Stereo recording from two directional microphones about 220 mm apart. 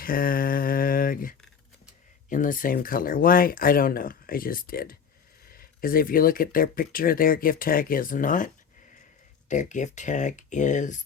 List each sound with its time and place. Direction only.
0.0 s a sound: 40° left (ahead or behind)
2.3 s speech: 35° left (ahead or behind)
9.5 s speech: 35° left (ahead or behind)